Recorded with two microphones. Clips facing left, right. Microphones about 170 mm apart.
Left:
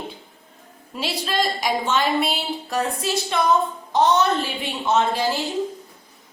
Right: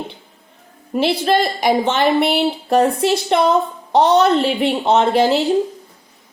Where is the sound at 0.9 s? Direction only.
65° right (ahead or behind).